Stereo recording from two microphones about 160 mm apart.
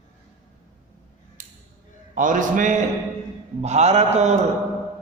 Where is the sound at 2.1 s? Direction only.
55° right (ahead or behind).